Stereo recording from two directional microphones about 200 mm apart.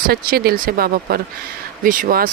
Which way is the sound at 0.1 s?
50° right (ahead or behind).